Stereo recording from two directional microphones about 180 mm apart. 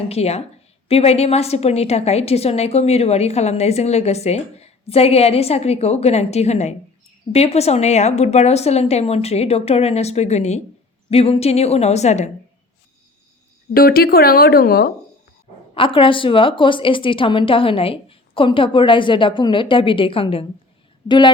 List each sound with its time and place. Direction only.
0.1 s a woman's voice: 35° left (ahead or behind)
13.7 s speech: 55° left (ahead or behind)
15.7 s a woman's voice: 30° left (ahead or behind)